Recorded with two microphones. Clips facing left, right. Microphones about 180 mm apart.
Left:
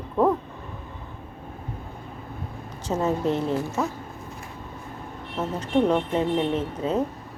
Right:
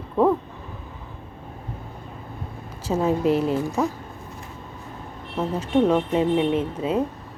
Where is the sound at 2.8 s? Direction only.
10° right (ahead or behind).